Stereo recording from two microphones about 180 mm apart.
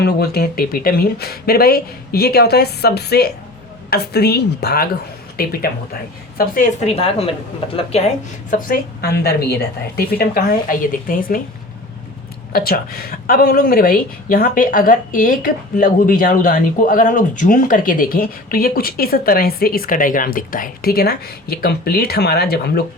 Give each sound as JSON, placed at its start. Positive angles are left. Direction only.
{"t": 0.0, "sound": "speech", "side_deg": 60}
{"t": 12.5, "sound": "speech", "side_deg": 55}